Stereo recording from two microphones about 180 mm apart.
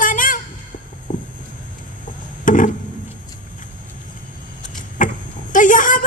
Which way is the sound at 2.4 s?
45° left (ahead or behind).